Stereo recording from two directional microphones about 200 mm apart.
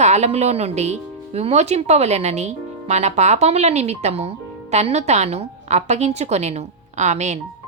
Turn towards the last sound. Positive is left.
turn(degrees=-35)  # may be behind; listen again after turning